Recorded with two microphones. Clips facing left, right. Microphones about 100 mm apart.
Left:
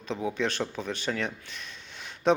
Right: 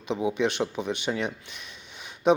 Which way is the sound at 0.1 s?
15° right (ahead or behind).